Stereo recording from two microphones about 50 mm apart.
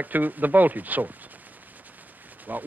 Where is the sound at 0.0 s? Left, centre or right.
Right.